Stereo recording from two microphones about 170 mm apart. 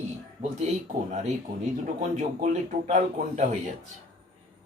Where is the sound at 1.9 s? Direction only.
45° right (ahead or behind).